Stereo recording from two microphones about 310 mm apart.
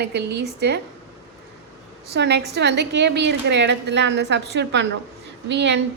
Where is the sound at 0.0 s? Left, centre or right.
Right.